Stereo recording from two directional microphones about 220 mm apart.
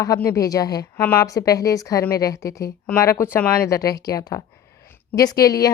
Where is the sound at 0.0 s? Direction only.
15° left (ahead or behind).